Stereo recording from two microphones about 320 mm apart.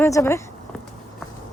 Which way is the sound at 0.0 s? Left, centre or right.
Centre.